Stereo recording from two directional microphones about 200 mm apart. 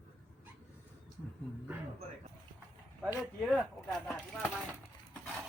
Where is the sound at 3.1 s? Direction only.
15° left (ahead or behind).